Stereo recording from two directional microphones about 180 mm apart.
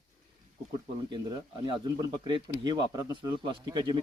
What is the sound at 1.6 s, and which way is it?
Speech, 25° right (ahead or behind).